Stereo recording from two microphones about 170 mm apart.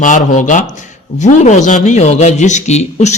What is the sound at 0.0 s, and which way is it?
A man's voice, 45° left (ahead or behind).